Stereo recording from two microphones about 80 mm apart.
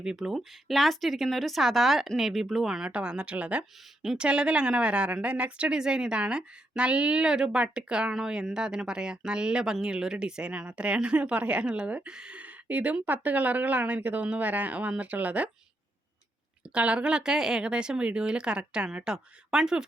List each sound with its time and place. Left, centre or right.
0.0 s a woman's voice: centre
16.7 s a woman's voice: centre